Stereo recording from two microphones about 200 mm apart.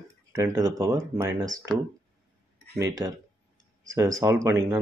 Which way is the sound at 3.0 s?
15° right (ahead or behind).